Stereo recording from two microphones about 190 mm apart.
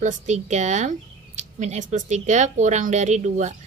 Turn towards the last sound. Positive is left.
turn(degrees=-40)  # may be behind; listen again after turning